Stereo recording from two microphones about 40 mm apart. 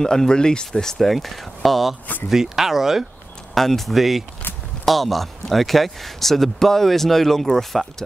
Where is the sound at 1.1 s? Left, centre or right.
Centre.